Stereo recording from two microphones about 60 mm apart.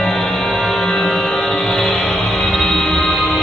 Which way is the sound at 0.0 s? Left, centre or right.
Centre.